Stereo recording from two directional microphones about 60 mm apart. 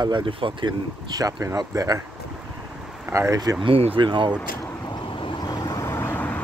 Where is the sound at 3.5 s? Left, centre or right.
Right.